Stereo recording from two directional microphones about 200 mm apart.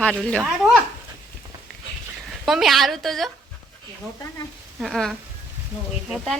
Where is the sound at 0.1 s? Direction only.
5° left (ahead or behind).